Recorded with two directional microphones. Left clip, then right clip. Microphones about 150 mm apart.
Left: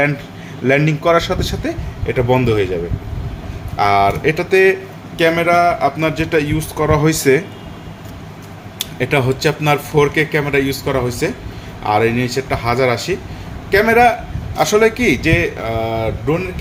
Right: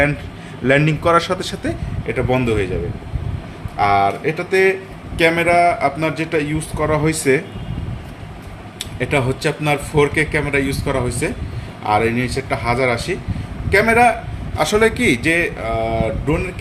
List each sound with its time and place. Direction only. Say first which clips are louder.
0.6 s a man's voice: left 1 dB; 5° right (ahead or behind)
2.0 s speech: left 3 dB; 10° left (ahead or behind)
3.8 s speech: left 2 dB; 30° left (ahead or behind)
5.1 s a man's voice: left 1 dB; 5° right (ahead or behind)
5.8 s speech: left 2 dB; 5° left (ahead or behind)
8.8 s a man's voice: left 3 dB; 15° left (ahead or behind)
15.6 s speech: even; 15° left (ahead or behind)